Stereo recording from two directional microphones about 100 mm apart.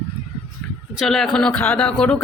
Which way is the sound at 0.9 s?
Centre (ahead or behind).